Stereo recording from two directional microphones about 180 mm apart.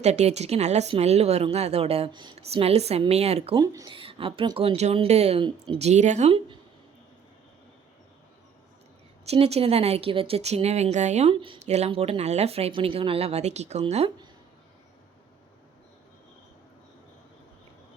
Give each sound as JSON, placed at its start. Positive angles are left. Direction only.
{"t": 0.0, "sound": "speech", "side_deg": -40}
{"t": 3.6, "sound": "speech", "side_deg": -20}
{"t": 3.9, "sound": "speech", "side_deg": -30}
{"t": 5.9, "sound": "speech", "side_deg": -40}
{"t": 9.2, "sound": "speech", "side_deg": -35}